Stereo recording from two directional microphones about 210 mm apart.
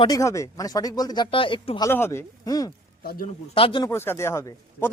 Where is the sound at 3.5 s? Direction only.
25° left (ahead or behind).